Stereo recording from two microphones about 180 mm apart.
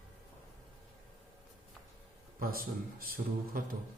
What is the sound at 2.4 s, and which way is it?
A man's voice, 55° right (ahead or behind).